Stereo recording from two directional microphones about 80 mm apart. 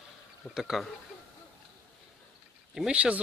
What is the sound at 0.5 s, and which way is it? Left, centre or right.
Speech, centre.